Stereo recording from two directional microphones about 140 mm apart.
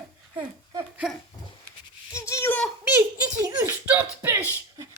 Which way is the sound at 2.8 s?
20° right (ahead or behind).